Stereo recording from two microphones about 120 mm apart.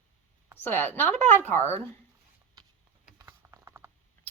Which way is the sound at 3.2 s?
20° right (ahead or behind).